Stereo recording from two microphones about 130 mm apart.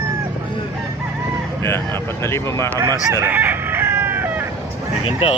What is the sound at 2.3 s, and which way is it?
Speech, 20° left (ahead or behind).